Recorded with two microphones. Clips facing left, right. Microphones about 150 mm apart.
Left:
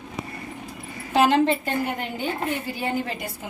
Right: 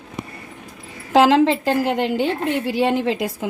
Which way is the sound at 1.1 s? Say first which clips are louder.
Right 5 dB; 90° right.